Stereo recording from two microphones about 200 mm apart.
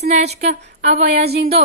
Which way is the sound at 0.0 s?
35° right (ahead or behind).